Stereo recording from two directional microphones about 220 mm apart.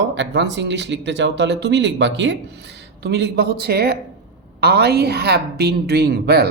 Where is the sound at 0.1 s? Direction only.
55° right (ahead or behind).